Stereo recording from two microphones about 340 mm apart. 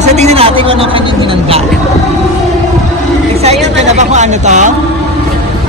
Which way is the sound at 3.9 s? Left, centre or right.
Centre.